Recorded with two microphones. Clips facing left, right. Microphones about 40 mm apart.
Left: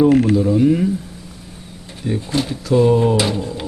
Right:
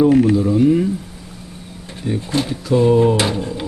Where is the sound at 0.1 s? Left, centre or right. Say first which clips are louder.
Right 1 dB; left.